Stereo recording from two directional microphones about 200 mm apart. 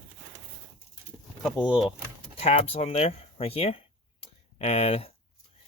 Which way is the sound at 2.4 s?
30° left (ahead or behind).